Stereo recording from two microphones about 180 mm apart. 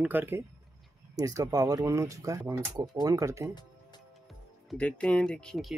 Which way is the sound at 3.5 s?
25° left (ahead or behind).